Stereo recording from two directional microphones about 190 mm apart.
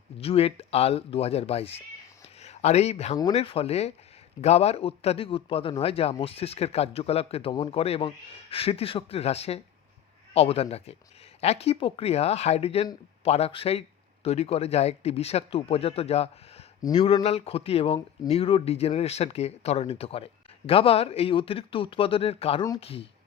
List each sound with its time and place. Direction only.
0.2 s speech: 30° left (ahead or behind)